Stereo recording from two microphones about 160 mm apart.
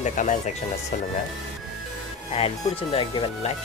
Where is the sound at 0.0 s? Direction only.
50° left (ahead or behind).